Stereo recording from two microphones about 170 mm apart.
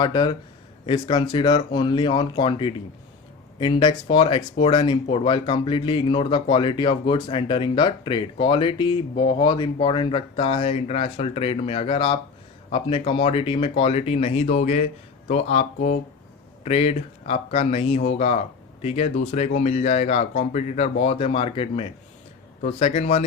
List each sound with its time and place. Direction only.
0.0 s speech: 25° left (ahead or behind)